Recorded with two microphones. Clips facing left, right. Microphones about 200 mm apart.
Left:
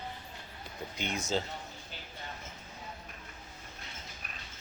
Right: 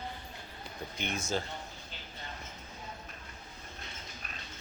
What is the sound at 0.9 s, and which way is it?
Speech, 15° left (ahead or behind).